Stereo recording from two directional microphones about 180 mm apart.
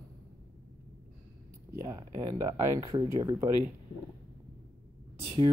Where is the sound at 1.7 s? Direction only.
15° right (ahead or behind).